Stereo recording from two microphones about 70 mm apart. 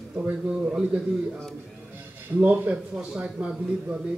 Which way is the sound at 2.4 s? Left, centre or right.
Right.